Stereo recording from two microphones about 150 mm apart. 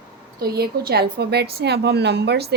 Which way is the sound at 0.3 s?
90° right.